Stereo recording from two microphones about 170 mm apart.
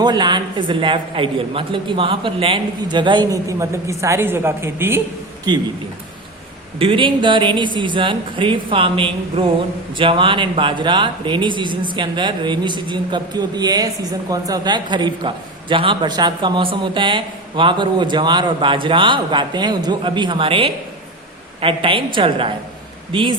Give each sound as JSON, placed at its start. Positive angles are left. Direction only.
{"t": 0.0, "sound": "speech", "side_deg": -25}
{"t": 5.5, "sound": "speech", "side_deg": -25}
{"t": 6.7, "sound": "a woman's voice", "side_deg": -30}